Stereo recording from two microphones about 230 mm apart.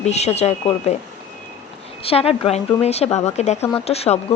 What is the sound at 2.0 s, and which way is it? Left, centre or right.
A woman's voice, left.